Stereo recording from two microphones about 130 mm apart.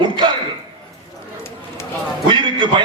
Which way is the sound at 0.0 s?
40° right (ahead or behind).